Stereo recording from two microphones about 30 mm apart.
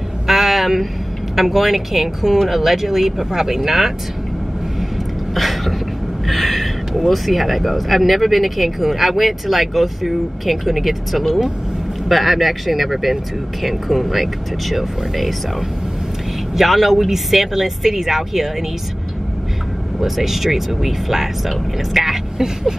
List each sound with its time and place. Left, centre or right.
0.3 s a sound: centre
1.3 s speech: centre
5.3 s a sound: centre
7.1 s speech: centre
16.5 s speech: centre
20.0 s speech: centre
22.4 s speech: centre